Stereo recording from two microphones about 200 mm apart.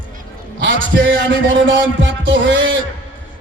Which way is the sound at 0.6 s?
65° right (ahead or behind).